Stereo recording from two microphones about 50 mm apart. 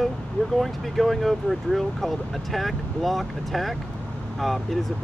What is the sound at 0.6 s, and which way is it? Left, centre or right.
Speech, centre.